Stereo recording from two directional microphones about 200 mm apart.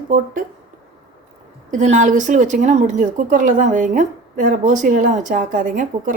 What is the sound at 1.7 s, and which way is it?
A woman's voice, 40° right (ahead or behind).